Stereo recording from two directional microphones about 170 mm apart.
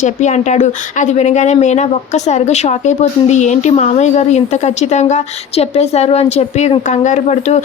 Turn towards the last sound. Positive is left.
turn(degrees=40)  # may be behind; listen again after turning